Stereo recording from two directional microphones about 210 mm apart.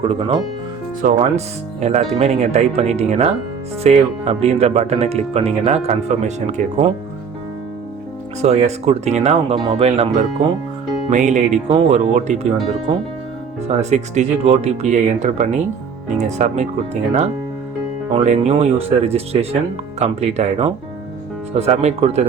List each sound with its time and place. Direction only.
0.0 s speech: 25° right (ahead or behind)
1.0 s speech: 35° right (ahead or behind)
8.4 s speech: 30° right (ahead or behind)
11.1 s speech: 35° right (ahead or behind)
13.7 s speech: 35° right (ahead or behind)